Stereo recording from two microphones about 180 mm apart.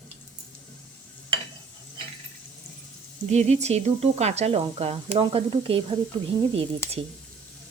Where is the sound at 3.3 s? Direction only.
40° right (ahead or behind).